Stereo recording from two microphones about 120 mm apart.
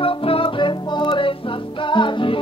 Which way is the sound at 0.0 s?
50° left (ahead or behind).